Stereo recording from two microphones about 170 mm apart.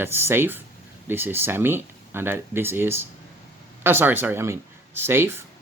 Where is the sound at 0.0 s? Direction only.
15° right (ahead or behind).